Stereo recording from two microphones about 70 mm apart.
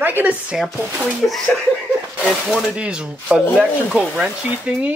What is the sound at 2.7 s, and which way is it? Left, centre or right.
Speech, centre.